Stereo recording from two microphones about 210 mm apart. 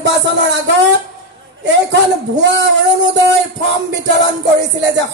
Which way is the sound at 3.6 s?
55° right (ahead or behind).